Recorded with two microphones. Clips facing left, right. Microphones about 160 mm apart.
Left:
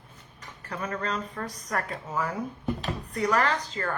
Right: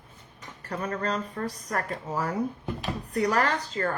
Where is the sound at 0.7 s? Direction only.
35° right (ahead or behind).